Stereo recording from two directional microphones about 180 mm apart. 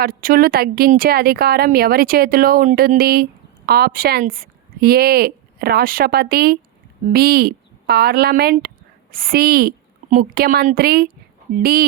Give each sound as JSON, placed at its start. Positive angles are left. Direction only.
{"t": 0.0, "sound": "speech", "side_deg": -50}